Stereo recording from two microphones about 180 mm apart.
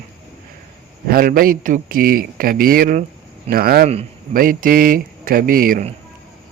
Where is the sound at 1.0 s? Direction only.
55° right (ahead or behind).